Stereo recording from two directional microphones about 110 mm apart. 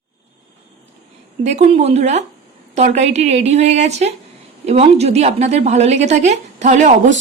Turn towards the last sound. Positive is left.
turn(degrees=-90)